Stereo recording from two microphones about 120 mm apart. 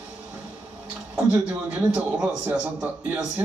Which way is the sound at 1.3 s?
10° right (ahead or behind).